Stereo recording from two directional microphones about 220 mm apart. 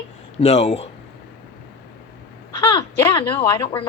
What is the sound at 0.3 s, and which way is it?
Speech, 30° left (ahead or behind).